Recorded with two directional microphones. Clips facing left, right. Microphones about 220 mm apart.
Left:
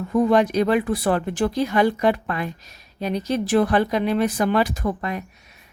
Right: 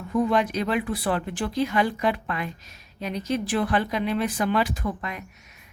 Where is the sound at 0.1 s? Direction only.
40° left (ahead or behind).